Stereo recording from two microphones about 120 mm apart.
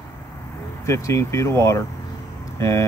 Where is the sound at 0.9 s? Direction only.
25° left (ahead or behind).